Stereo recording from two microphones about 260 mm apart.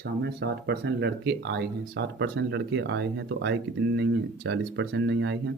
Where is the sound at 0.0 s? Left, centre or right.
Right.